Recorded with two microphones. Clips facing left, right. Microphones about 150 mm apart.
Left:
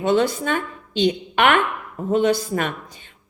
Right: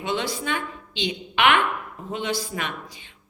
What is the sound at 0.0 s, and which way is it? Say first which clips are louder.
A woman's voice: left 8 dB; 50° left (ahead or behind).